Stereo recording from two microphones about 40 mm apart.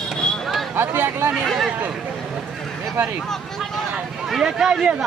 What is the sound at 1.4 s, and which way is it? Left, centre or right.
Speech, centre.